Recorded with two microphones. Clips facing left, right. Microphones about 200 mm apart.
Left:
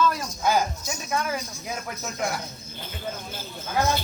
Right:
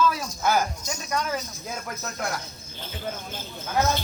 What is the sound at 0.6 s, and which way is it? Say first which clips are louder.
Speech: even; 5° left (ahead or behind).